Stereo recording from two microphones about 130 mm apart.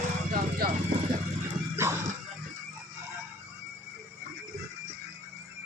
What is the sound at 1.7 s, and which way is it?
Music, 20° right (ahead or behind).